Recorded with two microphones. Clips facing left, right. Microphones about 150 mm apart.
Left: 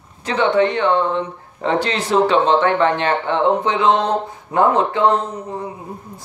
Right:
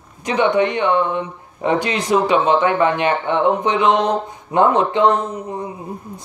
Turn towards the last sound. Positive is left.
turn(degrees=-15)  # may be behind; listen again after turning